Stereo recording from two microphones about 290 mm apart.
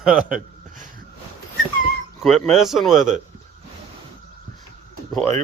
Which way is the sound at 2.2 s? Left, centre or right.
Centre.